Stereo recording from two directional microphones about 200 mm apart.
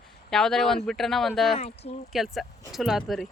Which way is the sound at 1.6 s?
30° left (ahead or behind).